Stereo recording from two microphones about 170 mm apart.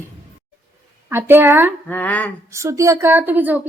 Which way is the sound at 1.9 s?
10° left (ahead or behind).